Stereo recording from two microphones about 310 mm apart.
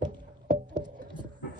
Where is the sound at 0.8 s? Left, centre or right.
Centre.